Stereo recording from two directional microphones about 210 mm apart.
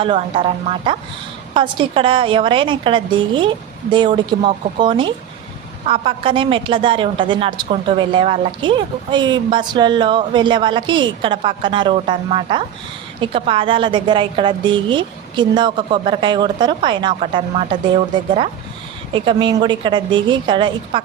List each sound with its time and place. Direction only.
0.0 s a woman's voice: 25° right (ahead or behind)